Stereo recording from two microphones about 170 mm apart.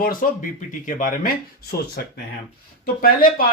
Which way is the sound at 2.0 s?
70° left (ahead or behind).